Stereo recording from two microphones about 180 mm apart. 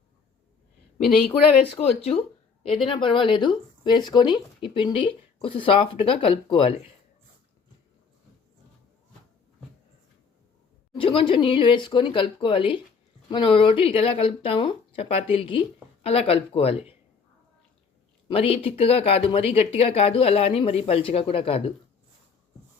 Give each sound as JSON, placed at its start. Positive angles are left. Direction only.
{"t": 1.8, "sound": "speech", "side_deg": 35}
{"t": 10.9, "sound": "speech", "side_deg": 30}
{"t": 18.3, "sound": "speech", "side_deg": 30}